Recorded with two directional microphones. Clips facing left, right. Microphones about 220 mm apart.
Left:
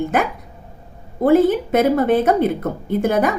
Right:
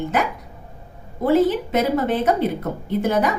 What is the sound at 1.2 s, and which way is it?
A woman's voice, 50° left (ahead or behind).